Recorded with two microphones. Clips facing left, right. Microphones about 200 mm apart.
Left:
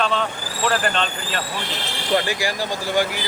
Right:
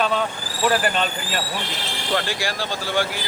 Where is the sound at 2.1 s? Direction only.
15° left (ahead or behind).